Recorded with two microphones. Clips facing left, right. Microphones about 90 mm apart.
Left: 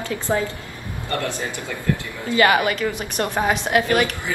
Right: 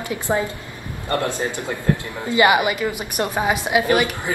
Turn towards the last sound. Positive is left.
turn(degrees=-15)  # may be behind; listen again after turning